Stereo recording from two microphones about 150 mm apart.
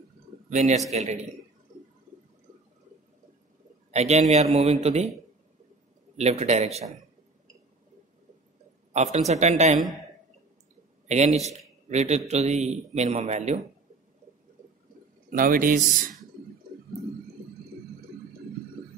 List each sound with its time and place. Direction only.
0.5 s a man's voice: 50° right (ahead or behind)
3.9 s a man's voice: 45° right (ahead or behind)
6.1 s a man's voice: 45° right (ahead or behind)
8.9 s a man's voice: 50° right (ahead or behind)
11.1 s a man's voice: 50° right (ahead or behind)
15.2 s speech: 70° right (ahead or behind)